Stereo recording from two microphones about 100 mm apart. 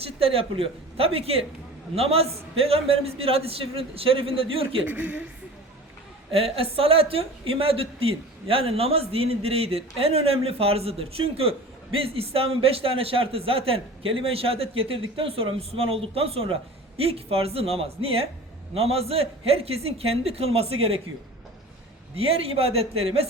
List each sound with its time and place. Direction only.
0.0 s a woman's voice: 75° right (ahead or behind)
2.0 s a woman's voice: 90° right; by 4.8 s 70° right (ahead or behind)
4.9 s a woman's voice: 15° right (ahead or behind)
6.3 s a woman's voice: 70° right (ahead or behind)
22.1 s a woman's voice: 75° right (ahead or behind)